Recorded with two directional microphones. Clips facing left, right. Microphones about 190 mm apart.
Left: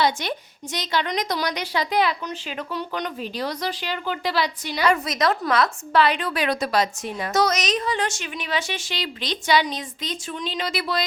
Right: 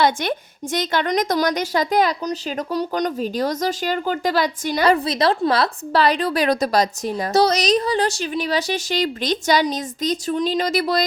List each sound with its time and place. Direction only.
0.0 s a woman's voice: 50° right (ahead or behind)